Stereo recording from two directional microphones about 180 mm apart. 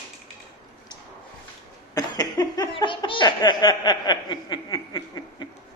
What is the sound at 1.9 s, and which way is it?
Laughter, 20° left (ahead or behind).